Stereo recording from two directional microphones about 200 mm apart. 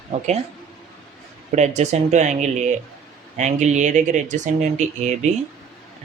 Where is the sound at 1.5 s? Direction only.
35° right (ahead or behind).